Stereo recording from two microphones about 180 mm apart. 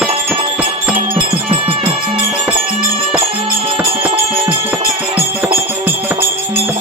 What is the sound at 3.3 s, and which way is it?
Music, 30° right (ahead or behind).